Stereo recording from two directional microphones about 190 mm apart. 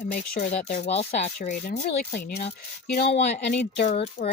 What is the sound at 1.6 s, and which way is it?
Speech, 50° left (ahead or behind).